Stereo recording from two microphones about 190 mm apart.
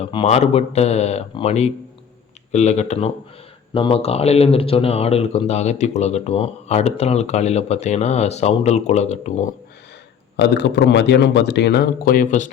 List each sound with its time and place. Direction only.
0.0 s speech: 30° left (ahead or behind)
10.3 s speech: 60° left (ahead or behind); by 12.5 s 40° left (ahead or behind)